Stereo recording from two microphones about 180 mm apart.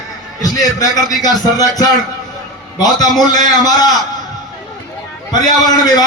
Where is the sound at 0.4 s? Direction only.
20° left (ahead or behind).